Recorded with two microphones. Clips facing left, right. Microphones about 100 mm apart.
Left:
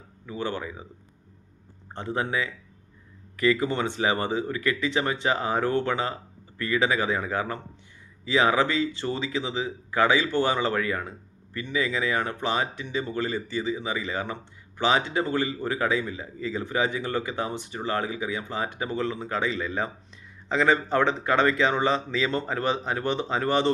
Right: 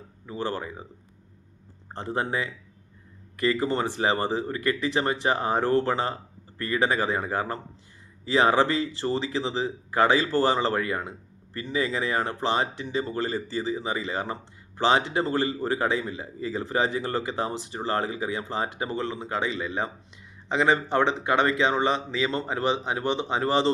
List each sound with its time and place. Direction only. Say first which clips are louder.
0.3 s speech: even; 35° right (ahead or behind)
2.0 s speech: even; 30° right (ahead or behind)